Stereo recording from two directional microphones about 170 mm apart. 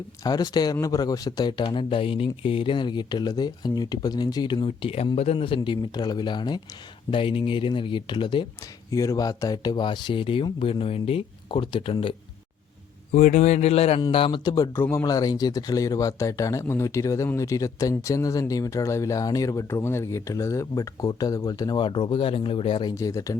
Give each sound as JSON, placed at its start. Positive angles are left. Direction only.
{"t": 0.3, "sound": "speech", "side_deg": 25}
{"t": 13.1, "sound": "speech", "side_deg": 45}